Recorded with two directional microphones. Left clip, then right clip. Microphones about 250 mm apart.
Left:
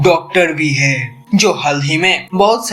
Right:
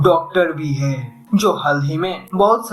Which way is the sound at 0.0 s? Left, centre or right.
Left.